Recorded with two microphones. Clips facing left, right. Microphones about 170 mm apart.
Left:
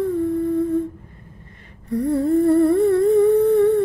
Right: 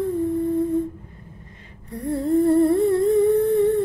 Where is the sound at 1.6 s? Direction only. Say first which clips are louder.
Left 11 dB; 60° left (ahead or behind).